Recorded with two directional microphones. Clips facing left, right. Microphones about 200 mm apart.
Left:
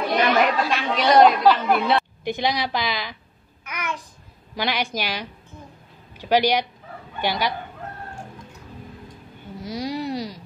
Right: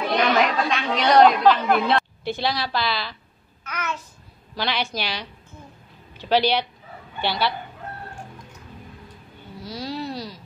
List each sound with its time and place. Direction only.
0.1 s speech: 5° left (ahead or behind)
2.2 s a woman's voice: 15° left (ahead or behind)
9.6 s a sound: 20° left (ahead or behind)